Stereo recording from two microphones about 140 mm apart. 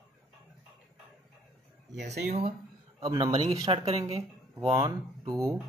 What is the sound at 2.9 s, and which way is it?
Speech, 25° right (ahead or behind).